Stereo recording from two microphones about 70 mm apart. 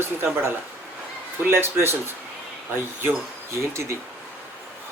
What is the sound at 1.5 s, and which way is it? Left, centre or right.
Speech, right.